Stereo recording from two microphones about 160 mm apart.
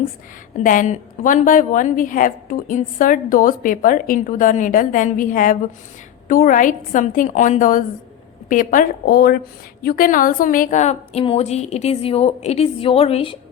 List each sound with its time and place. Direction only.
0.6 s a woman's voice: 55° left (ahead or behind); by 13.3 s 35° left (ahead or behind)